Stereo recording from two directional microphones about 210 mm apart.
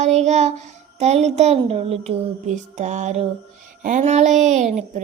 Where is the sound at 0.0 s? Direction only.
30° right (ahead or behind).